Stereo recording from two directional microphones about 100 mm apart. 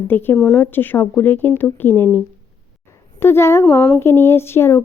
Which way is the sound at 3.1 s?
25° left (ahead or behind).